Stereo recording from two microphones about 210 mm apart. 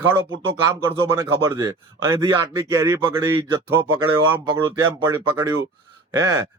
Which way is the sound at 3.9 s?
80° right.